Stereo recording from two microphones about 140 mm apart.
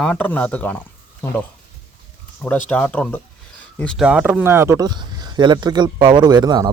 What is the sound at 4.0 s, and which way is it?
Speech, 5° right (ahead or behind).